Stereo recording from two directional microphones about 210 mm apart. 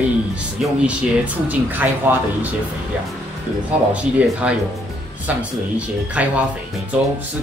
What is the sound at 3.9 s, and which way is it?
Speech, 5° right (ahead or behind).